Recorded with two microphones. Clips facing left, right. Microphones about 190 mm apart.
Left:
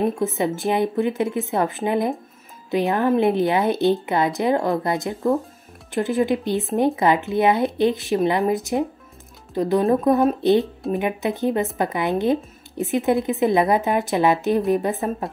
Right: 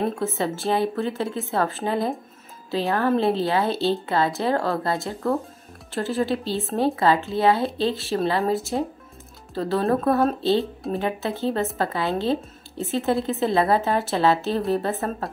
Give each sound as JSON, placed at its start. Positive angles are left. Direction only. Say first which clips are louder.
{"t": 0.0, "sound": "a woman's voice", "louder": "left 3 dB", "side_deg": 15}